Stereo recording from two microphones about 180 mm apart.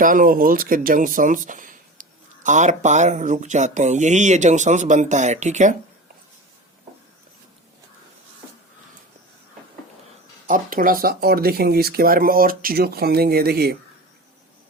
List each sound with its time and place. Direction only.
0.0 s speech: 50° right (ahead or behind)
10.4 s speech: 50° right (ahead or behind)